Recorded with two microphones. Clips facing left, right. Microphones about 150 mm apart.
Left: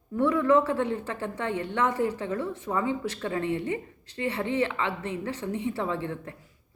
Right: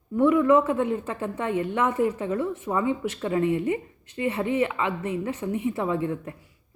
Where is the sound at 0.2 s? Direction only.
15° right (ahead or behind).